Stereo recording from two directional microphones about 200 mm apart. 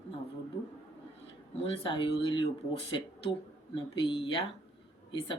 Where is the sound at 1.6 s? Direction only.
25° left (ahead or behind).